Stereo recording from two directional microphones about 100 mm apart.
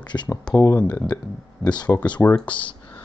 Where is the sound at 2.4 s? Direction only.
55° left (ahead or behind).